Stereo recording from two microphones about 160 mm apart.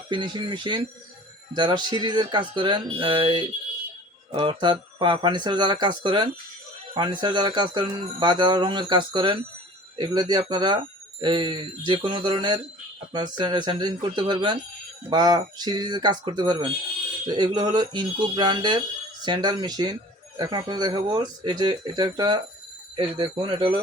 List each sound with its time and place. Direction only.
0.1 s speech: 30° right (ahead or behind)